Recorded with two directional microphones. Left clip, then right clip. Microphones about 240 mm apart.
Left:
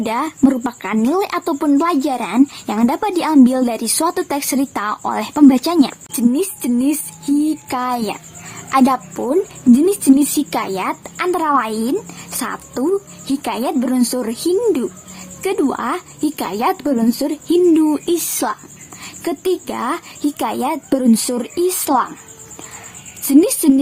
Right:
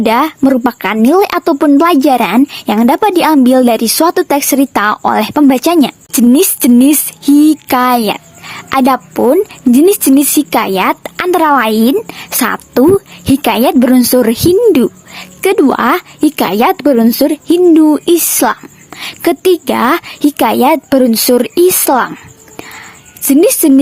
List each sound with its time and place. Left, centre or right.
0.0 s a woman's voice: right
23.2 s a woman's voice: right